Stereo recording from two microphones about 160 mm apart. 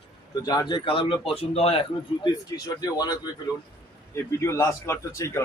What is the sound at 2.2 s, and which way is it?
A man's voice, 25° left (ahead or behind).